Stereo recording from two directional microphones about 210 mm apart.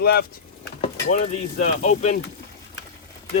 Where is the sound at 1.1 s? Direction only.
35° left (ahead or behind).